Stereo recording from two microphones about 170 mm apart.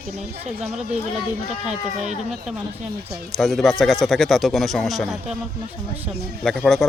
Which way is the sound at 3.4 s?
Centre (ahead or behind).